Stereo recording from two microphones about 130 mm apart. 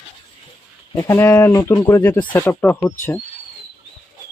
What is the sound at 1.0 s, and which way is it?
Speech, 25° left (ahead or behind).